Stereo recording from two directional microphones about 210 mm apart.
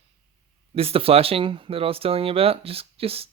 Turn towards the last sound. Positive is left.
turn(degrees=-25)  # may be behind; listen again after turning